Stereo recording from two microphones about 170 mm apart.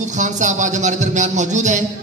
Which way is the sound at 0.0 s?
45° right (ahead or behind).